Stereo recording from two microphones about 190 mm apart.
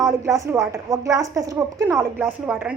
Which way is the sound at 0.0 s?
15° right (ahead or behind).